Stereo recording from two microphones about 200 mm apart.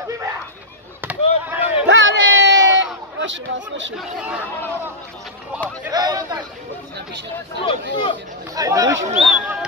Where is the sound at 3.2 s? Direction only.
70° right (ahead or behind).